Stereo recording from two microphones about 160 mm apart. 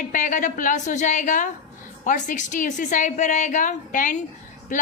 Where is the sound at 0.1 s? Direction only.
55° left (ahead or behind).